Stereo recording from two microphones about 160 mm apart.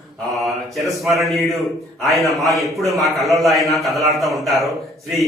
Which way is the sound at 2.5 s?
20° right (ahead or behind).